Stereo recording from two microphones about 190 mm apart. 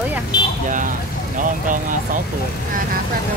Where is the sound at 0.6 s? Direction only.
45° right (ahead or behind).